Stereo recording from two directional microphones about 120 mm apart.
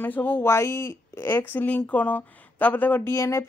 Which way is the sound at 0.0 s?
15° left (ahead or behind).